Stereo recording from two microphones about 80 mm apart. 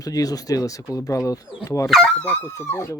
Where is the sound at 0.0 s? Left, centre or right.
Left.